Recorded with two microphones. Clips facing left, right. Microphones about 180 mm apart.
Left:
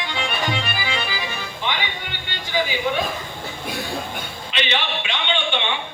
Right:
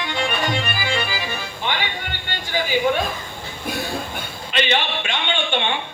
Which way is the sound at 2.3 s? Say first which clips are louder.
Right 1 dB; 50° right (ahead or behind).